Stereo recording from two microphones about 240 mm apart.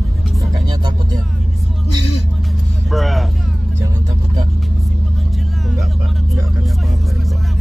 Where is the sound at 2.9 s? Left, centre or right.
Centre.